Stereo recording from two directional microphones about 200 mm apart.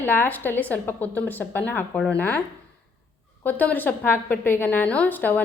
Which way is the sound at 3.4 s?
10° left (ahead or behind).